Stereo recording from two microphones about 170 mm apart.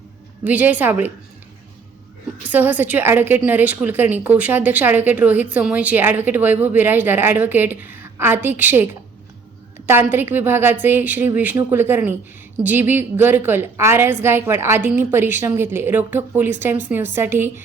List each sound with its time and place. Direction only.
0.4 s a woman's voice: 10° right (ahead or behind)
2.4 s a woman's voice: 10° right (ahead or behind)